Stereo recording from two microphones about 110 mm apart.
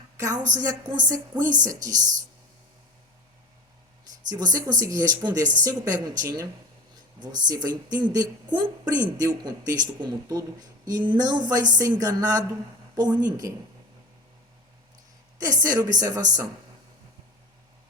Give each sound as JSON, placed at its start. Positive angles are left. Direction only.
{"t": 0.2, "sound": "a woman's voice", "side_deg": -30}
{"t": 4.3, "sound": "a woman's voice", "side_deg": -35}
{"t": 15.4, "sound": "a woman's voice", "side_deg": -35}